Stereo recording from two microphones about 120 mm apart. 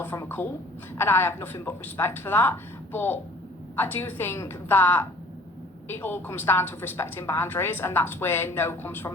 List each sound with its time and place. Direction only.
0.0 s a woman's voice: 20° left (ahead or behind)